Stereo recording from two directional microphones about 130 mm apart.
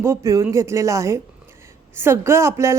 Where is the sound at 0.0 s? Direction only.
25° right (ahead or behind).